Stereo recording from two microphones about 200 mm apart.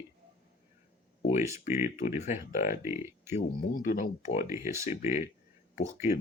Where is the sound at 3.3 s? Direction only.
40° left (ahead or behind).